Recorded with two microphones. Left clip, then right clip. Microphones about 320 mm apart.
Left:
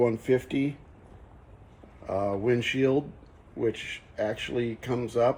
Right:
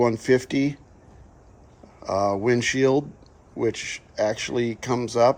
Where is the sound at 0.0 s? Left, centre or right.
Centre.